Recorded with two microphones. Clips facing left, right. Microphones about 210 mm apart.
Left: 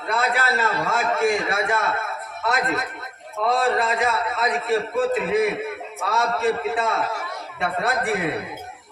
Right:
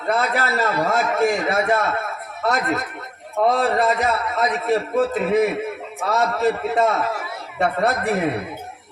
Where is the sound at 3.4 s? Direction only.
40° right (ahead or behind).